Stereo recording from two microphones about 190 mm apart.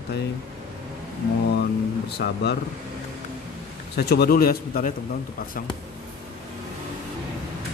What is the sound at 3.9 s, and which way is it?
A man's voice, 60° left (ahead or behind).